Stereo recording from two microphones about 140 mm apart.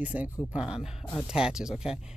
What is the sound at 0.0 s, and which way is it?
Speech, 10° right (ahead or behind).